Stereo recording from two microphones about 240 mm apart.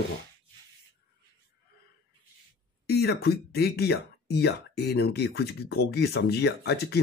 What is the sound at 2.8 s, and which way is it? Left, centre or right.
Speech, left.